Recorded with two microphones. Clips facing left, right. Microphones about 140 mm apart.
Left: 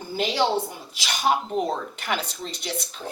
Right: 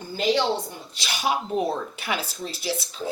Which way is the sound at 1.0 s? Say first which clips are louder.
Left 2 dB; 10° right (ahead or behind).